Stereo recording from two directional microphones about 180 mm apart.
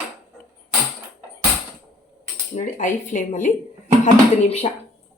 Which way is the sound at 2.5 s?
45° left (ahead or behind).